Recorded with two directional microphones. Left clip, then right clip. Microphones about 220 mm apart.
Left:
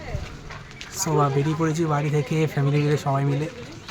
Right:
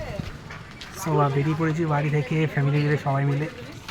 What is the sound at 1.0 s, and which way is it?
Speech, 5° left (ahead or behind).